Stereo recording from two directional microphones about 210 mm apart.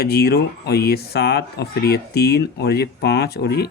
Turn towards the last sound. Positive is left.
turn(degrees=50)  # may be behind; listen again after turning